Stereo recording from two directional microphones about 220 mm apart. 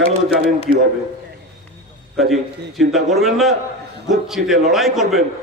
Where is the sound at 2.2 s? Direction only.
Centre (ahead or behind).